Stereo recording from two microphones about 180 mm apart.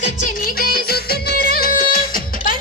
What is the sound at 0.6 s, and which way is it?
Music, 55° left (ahead or behind).